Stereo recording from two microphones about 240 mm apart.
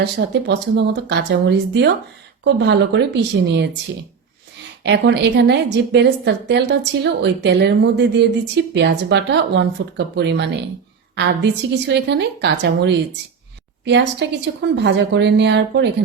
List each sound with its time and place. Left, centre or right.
0.0 s a woman's voice: right
4.8 s a woman's voice: right